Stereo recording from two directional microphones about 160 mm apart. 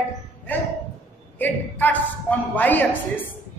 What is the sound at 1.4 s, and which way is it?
Speech, 10° left (ahead or behind).